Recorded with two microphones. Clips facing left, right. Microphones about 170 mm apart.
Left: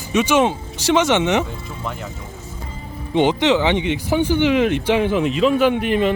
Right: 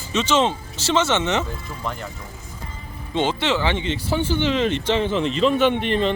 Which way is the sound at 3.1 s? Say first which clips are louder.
Left 6 dB; 15° left (ahead or behind).